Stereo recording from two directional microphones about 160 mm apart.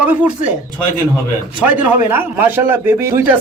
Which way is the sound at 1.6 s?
10° right (ahead or behind).